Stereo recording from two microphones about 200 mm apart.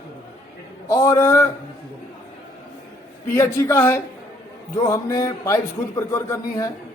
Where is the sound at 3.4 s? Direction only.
10° left (ahead or behind).